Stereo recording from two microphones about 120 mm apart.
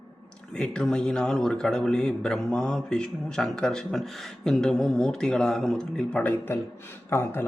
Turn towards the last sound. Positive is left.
turn(degrees=20)  # may be behind; listen again after turning